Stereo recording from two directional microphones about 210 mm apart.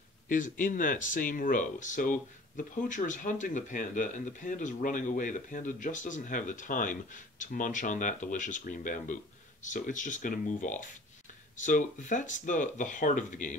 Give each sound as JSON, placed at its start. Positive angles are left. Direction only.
{"t": 0.3, "sound": "speech", "side_deg": 40}